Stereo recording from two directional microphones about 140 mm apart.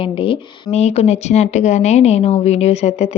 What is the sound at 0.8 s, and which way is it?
A woman's voice, 50° left (ahead or behind).